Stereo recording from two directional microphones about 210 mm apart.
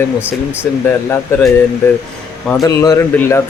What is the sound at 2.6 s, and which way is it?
Speech, 15° left (ahead or behind).